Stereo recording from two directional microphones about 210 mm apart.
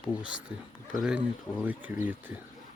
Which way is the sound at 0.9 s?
Centre (ahead or behind).